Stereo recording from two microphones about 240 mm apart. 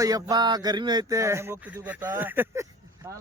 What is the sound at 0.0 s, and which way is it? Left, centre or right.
Speech, centre.